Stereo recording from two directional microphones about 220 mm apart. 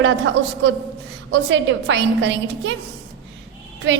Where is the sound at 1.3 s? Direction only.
55° right (ahead or behind).